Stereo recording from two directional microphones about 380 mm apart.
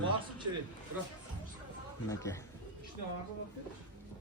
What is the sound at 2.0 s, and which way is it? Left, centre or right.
Speech, centre.